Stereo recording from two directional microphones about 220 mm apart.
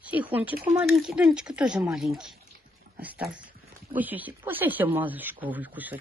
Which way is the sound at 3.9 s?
5° right (ahead or behind).